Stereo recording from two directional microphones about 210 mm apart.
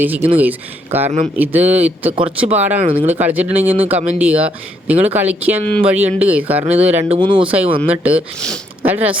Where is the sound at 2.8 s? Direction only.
25° right (ahead or behind).